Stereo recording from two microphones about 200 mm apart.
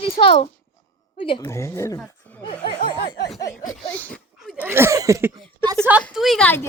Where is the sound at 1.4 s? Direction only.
15° left (ahead or behind).